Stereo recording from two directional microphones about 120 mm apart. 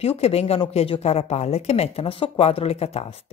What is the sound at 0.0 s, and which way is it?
Speech, 55° left (ahead or behind).